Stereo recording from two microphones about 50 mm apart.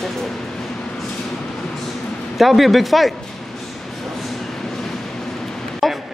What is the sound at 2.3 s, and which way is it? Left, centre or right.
Speech, centre.